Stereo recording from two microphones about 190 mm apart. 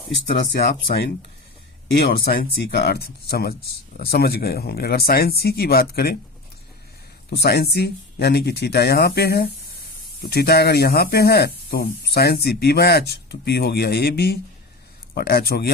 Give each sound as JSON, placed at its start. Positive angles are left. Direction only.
{"t": 0.3, "sound": "speech", "side_deg": 55}
{"t": 7.3, "sound": "speech", "side_deg": 55}